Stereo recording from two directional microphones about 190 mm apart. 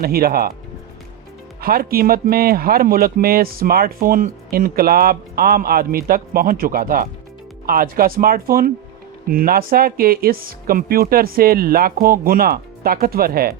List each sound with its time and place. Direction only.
0.0 s speech: 50° right (ahead or behind)
1.6 s speech: 55° right (ahead or behind)